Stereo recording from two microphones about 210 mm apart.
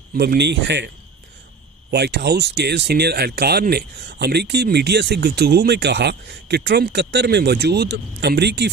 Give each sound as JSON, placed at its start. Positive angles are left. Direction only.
{"t": 0.1, "sound": "speech", "side_deg": -50}
{"t": 1.9, "sound": "speech", "side_deg": -50}